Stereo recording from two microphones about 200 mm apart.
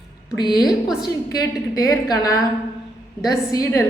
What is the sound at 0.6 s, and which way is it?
Speech, centre (ahead or behind).